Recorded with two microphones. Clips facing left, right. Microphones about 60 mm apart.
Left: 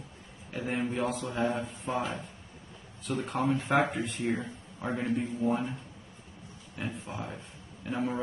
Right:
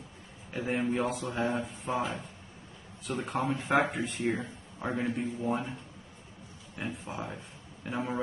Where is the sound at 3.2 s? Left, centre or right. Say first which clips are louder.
Left 2 dB; centre.